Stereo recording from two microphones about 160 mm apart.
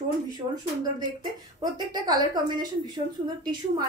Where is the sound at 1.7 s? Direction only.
25° right (ahead or behind).